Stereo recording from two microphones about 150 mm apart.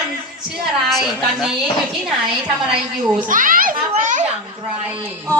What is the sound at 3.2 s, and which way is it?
Speech, 60° right (ahead or behind).